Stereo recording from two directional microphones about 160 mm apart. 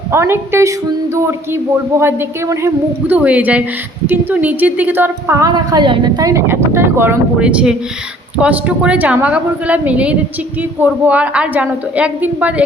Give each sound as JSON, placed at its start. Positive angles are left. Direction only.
{"t": 0.1, "sound": "a woman's voice", "side_deg": -15}